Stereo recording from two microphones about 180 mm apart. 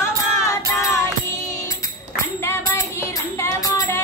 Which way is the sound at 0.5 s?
15° left (ahead or behind).